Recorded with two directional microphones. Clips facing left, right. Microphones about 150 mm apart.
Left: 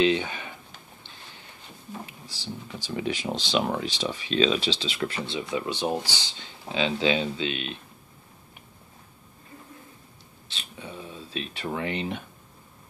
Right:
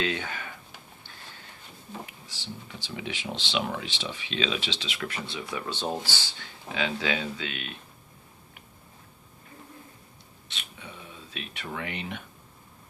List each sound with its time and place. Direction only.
0.0 s speech: 20° left (ahead or behind)
2.0 s speech: 35° left (ahead or behind)
10.5 s speech: 35° left (ahead or behind)